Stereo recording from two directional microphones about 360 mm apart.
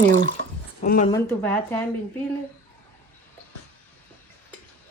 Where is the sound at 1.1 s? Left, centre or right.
Centre.